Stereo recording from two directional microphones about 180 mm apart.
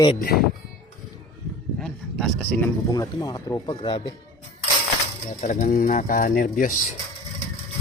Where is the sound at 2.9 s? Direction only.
20° left (ahead or behind).